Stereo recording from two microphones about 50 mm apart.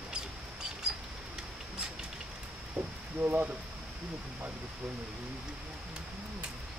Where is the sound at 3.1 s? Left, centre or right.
Right.